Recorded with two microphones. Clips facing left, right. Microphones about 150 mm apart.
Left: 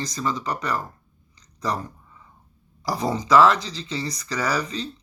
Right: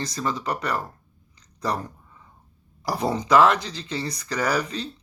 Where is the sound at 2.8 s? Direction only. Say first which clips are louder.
Even; 55° right (ahead or behind).